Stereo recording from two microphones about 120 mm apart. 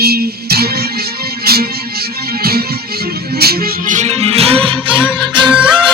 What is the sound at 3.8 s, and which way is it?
Music, 75° right (ahead or behind).